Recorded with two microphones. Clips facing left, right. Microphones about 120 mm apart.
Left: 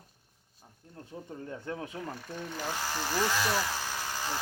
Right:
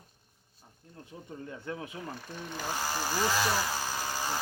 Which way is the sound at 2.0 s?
5° right (ahead or behind).